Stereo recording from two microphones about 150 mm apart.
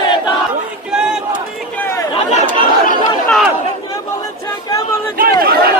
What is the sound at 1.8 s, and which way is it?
Chatter, 15° left (ahead or behind).